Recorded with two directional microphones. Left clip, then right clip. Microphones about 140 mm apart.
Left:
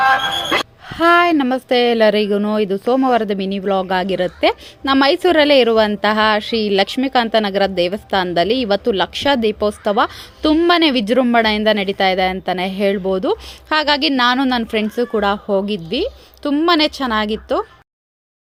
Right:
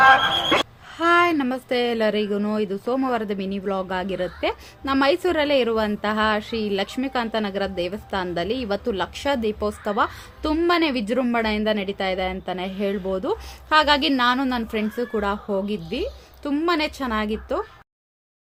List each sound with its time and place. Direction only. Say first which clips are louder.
0.0 s gasp: even; 20° right (ahead or behind)
0.9 s a woman's voice: left 6 dB; 30° left (ahead or behind)